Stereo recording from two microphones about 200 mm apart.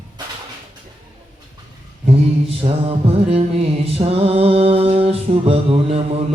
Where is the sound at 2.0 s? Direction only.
30° right (ahead or behind).